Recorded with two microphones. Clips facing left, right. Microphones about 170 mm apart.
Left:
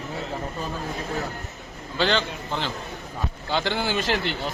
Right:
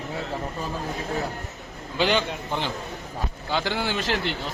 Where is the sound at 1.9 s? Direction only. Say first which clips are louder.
Right 1 dB; 15° right (ahead or behind).